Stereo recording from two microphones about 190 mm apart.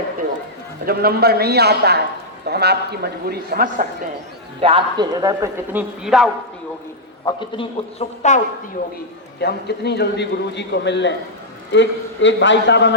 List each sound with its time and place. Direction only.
0.9 s a man's voice: 55° right (ahead or behind)
4.6 s a man's voice: 25° right (ahead or behind)
6.0 s a man's voice: centre (ahead or behind)
7.3 s a man's voice: 25° left (ahead or behind)
9.4 s a man's voice: 60° left (ahead or behind)